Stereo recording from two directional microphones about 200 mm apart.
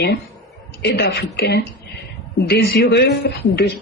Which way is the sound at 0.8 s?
55° left (ahead or behind).